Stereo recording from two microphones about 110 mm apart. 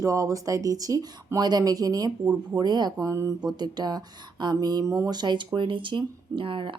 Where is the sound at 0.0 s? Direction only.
30° right (ahead or behind).